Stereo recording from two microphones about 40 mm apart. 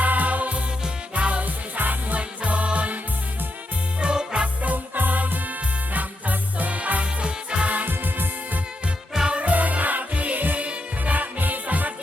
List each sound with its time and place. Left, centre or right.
0.0 s music: right
2.1 s music: right
4.0 s music: centre
4.6 s music: right
7.2 s music: right
7.7 s music: right
9.3 s music: right